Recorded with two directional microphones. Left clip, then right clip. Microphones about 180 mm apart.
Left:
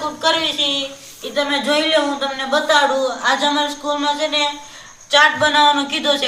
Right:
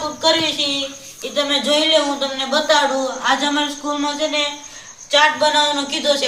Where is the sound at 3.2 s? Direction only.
25° left (ahead or behind).